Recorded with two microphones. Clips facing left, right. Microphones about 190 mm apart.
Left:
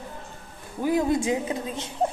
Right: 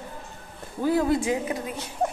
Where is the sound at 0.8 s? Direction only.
20° left (ahead or behind).